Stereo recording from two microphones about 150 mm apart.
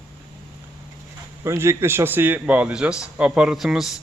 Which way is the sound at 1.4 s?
20° right (ahead or behind).